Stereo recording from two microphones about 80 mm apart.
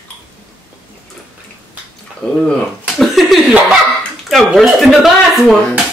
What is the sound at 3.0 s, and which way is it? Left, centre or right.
Chuckle, centre.